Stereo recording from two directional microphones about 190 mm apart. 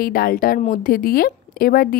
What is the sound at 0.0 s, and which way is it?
A woman's voice, 50° left (ahead or behind).